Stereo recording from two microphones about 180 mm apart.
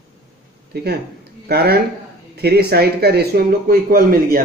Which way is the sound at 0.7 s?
65° right (ahead or behind).